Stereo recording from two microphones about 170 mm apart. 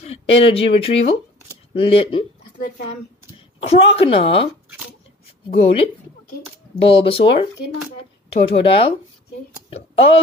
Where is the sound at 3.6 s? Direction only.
35° left (ahead or behind).